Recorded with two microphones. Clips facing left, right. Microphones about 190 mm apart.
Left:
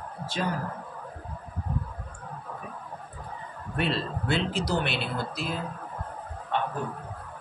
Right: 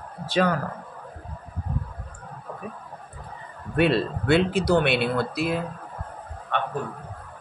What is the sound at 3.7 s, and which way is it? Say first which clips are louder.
Speech: right 8 dB; 65° right (ahead or behind).